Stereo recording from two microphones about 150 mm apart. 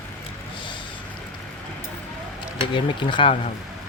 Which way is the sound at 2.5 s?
35° left (ahead or behind).